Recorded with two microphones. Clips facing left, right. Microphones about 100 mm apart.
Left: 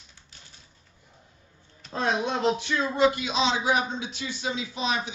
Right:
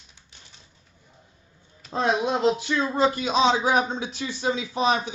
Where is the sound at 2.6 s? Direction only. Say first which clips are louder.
Right 1 dB; 30° right (ahead or behind).